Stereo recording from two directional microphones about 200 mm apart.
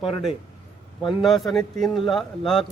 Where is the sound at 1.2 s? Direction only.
Centre (ahead or behind).